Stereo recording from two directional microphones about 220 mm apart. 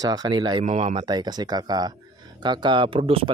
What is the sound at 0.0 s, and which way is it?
Speech, 15° right (ahead or behind).